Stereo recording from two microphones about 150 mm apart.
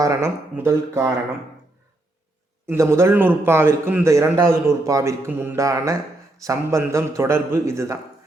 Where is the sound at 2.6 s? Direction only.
20° right (ahead or behind).